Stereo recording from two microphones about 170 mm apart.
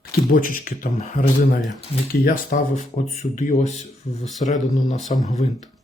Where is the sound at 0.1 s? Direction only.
55° left (ahead or behind).